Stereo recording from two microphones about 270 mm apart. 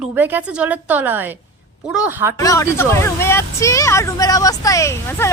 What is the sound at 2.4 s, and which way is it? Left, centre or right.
Speech, centre.